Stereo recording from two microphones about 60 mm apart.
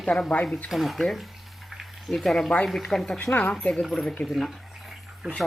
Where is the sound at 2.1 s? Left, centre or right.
Centre.